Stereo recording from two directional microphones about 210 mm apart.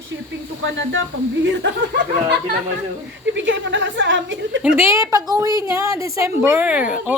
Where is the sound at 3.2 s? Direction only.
60° right (ahead or behind).